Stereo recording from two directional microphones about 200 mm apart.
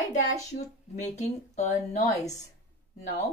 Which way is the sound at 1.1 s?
35° left (ahead or behind).